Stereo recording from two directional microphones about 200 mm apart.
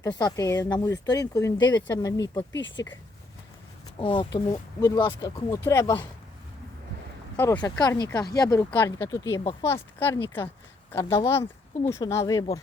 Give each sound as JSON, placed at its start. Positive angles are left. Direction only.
{"t": 0.0, "sound": "speech", "side_deg": 20}
{"t": 2.6, "sound": "speech", "side_deg": 65}
{"t": 4.0, "sound": "speech", "side_deg": 25}
{"t": 7.3, "sound": "speech", "side_deg": 10}
{"t": 7.6, "sound": "speech", "side_deg": 20}
{"t": 11.9, "sound": "speech", "side_deg": 15}